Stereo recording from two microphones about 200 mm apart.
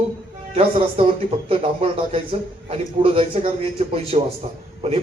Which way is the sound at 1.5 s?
25° right (ahead or behind).